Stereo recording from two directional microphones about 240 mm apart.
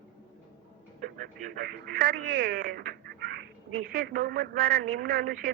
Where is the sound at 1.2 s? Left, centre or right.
Right.